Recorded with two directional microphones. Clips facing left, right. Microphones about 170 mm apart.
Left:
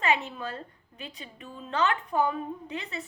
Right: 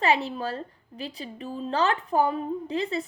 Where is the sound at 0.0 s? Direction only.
35° right (ahead or behind).